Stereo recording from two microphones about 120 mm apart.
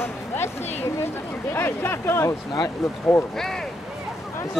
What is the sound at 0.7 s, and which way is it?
Speech, 65° left (ahead or behind).